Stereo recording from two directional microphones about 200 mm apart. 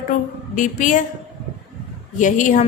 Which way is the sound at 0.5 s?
40° left (ahead or behind).